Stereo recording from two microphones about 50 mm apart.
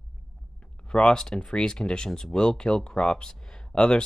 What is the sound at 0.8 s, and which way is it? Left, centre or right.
Speech, centre.